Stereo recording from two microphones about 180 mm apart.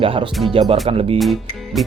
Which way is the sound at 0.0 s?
30° right (ahead or behind).